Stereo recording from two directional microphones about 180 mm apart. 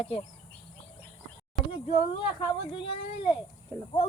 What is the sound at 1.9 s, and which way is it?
Speech, 35° left (ahead or behind).